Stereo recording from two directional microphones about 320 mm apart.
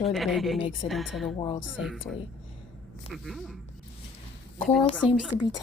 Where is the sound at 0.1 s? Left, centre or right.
Centre.